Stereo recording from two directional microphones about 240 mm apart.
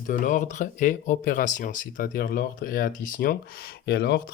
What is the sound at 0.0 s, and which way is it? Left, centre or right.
Speech, left.